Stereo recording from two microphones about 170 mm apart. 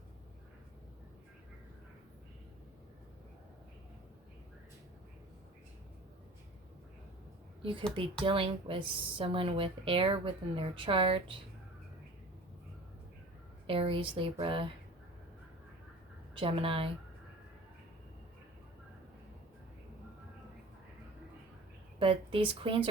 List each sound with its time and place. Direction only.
7.6 s a woman's voice: 30° right (ahead or behind)
13.7 s a woman's voice: 30° right (ahead or behind)
16.3 s a woman's voice: 30° right (ahead or behind)
21.9 s a woman's voice: 30° right (ahead or behind)